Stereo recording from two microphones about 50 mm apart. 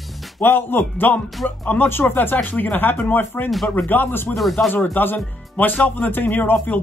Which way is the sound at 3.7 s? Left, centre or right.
Left.